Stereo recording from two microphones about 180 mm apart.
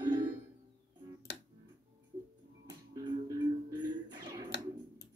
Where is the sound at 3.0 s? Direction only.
25° right (ahead or behind).